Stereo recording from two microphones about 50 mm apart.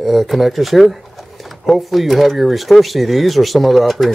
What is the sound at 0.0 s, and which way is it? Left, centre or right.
Speech, centre.